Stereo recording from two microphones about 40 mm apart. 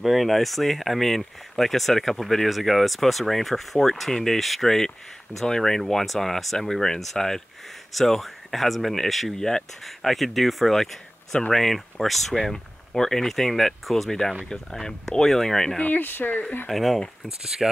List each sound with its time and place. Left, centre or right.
0.0 s speech: centre
9.4 s speech: centre
9.8 s speech: centre
15.8 s speech: left
16.6 s speech: centre
17.6 s sanding: centre